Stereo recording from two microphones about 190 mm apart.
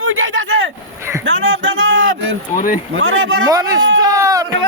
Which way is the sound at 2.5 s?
45° left (ahead or behind).